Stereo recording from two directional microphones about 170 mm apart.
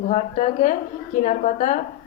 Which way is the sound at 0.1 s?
40° left (ahead or behind).